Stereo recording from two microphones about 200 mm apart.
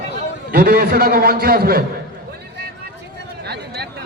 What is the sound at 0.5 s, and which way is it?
A man's voice, 50° right (ahead or behind).